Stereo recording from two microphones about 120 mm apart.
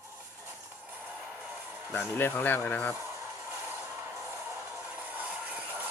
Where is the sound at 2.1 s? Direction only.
20° left (ahead or behind).